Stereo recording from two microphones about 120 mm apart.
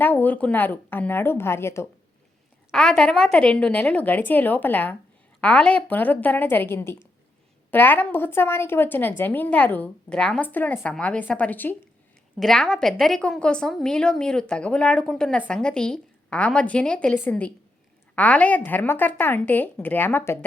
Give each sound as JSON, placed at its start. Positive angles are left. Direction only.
{"t": 0.0, "sound": "a woman's voice", "side_deg": 15}
{"t": 2.7, "sound": "a woman's voice", "side_deg": 5}
{"t": 12.4, "sound": "a woman's voice", "side_deg": 5}